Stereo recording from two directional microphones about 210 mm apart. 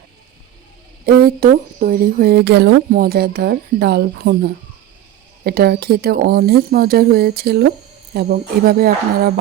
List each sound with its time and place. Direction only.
1.0 s speech: 45° right (ahead or behind)